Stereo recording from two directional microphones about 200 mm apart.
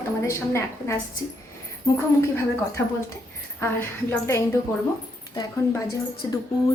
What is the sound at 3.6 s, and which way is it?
Speech, 10° left (ahead or behind).